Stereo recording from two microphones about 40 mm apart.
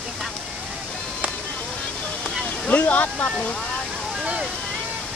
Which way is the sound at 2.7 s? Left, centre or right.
Left.